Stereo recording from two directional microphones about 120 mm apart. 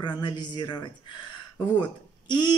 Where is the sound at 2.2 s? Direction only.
40° left (ahead or behind).